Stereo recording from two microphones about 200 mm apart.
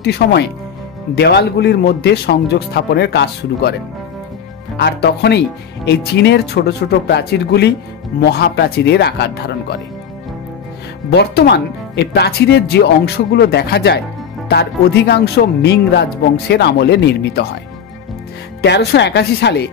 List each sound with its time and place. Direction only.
0.0 s speech: 55° left (ahead or behind)
4.7 s speech: 55° left (ahead or behind)
11.1 s speech: 55° left (ahead or behind)
18.6 s speech: 55° left (ahead or behind)